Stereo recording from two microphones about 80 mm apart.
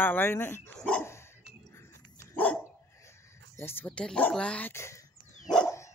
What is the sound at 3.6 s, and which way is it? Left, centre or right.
Speech, left.